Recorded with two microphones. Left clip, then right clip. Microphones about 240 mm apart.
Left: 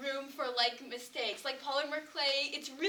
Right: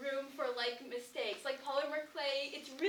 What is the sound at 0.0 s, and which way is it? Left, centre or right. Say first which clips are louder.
A woman's voice: left 1 dB; left.